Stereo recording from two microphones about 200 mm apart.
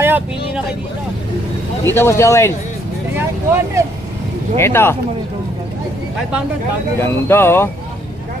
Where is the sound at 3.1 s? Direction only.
10° right (ahead or behind).